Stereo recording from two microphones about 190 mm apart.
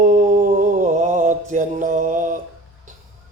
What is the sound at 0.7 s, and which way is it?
Mantra, 40° right (ahead or behind).